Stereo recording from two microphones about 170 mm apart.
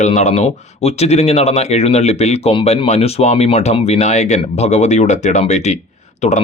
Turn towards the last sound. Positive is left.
turn(degrees=45)  # may be behind; listen again after turning